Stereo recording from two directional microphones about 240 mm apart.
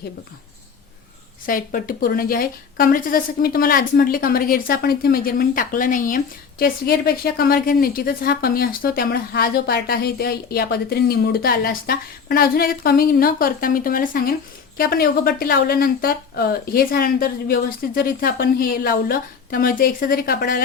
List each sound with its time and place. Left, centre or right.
1.5 s a woman's voice: left